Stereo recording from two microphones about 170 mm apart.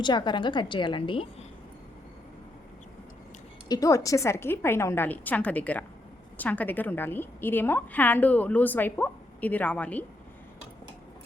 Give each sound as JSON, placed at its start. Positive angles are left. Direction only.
{"t": 0.0, "sound": "a woman's voice", "side_deg": 25}
{"t": 3.7, "sound": "a woman's voice", "side_deg": 20}